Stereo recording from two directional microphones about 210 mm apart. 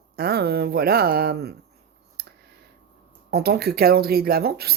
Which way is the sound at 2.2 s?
45° right (ahead or behind).